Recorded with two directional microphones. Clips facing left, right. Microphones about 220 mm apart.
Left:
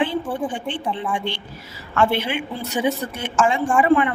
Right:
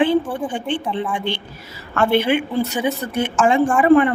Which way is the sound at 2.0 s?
55° right (ahead or behind).